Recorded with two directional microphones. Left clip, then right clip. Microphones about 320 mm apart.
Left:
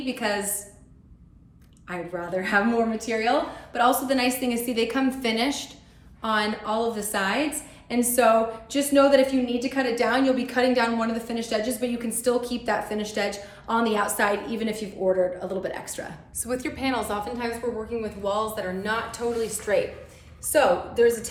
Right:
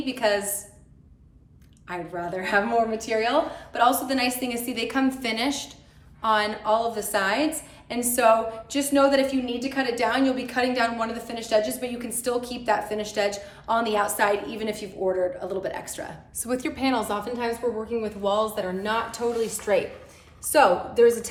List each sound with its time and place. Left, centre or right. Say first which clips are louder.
0.0 s a woman's voice: right 3 dB; centre
1.9 s a woman's voice: left 1 dB; centre